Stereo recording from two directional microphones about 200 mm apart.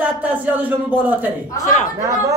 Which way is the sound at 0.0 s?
10° right (ahead or behind).